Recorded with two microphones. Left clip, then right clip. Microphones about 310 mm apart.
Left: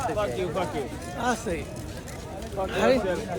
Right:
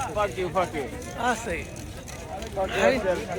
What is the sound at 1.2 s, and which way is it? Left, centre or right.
Speech, centre.